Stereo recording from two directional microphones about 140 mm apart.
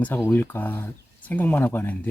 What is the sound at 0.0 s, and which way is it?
Speech, 10° left (ahead or behind).